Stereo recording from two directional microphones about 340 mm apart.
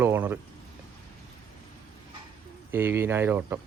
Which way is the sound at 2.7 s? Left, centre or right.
Centre.